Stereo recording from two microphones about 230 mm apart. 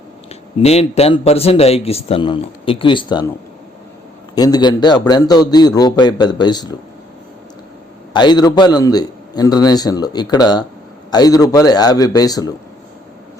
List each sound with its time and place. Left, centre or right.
0.6 s speech: left
4.4 s a man's voice: centre
8.1 s a man's voice: centre